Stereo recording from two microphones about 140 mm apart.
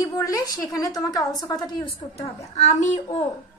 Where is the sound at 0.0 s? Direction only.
25° left (ahead or behind).